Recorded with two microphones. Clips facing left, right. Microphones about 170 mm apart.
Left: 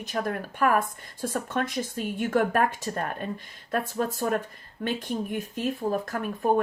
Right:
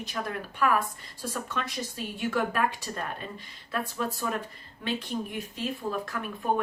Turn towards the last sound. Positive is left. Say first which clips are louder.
# left 5 dB
turn(degrees=45)  # may be behind; listen again after turning